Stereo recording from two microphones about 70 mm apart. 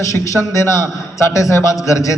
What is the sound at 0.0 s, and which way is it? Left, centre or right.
A man's voice, left.